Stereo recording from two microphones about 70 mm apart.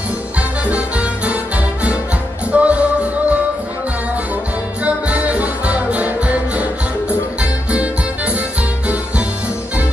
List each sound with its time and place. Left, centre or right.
0.7 s music: centre
2.5 s music: centre
4.8 s music: centre